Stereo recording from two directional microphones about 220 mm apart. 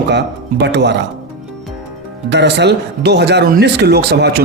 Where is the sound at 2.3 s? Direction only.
50° right (ahead or behind).